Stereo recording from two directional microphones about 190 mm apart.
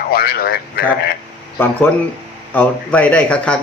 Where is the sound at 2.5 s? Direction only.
5° left (ahead or behind).